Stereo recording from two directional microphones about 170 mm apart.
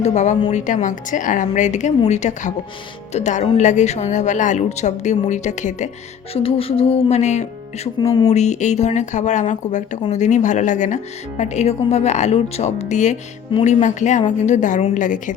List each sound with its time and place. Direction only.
0.0 s speech: 45° left (ahead or behind)
6.3 s speech: 35° left (ahead or behind); by 15.4 s 50° left (ahead or behind)